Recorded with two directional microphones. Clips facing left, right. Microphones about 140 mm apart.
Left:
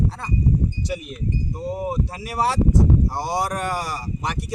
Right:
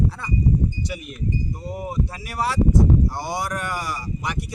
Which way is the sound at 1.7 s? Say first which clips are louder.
Left 2 dB; 25° left (ahead or behind).